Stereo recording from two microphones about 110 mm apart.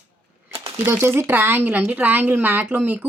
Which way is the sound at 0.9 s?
20° right (ahead or behind).